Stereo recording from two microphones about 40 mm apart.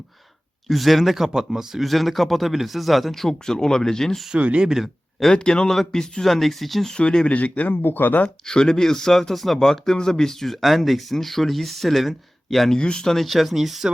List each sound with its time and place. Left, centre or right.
0.7 s speech: centre
4.4 s speech: right
5.3 s a man's voice: left
5.6 s speech: centre
7.0 s a man's voice: centre
7.3 s a man's voice: left
7.9 s speech: left
8.4 s speech: centre
12.7 s speech: centre
13.1 s speech: centre